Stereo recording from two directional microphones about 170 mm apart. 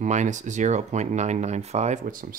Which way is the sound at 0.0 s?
45° right (ahead or behind).